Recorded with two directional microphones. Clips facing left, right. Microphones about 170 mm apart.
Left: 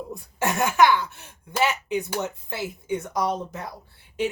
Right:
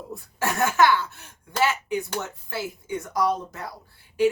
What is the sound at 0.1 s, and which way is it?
Speech, 20° left (ahead or behind).